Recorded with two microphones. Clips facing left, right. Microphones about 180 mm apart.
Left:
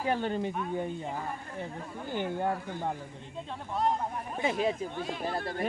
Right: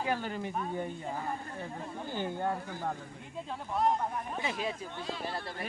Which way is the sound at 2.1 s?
15° left (ahead or behind).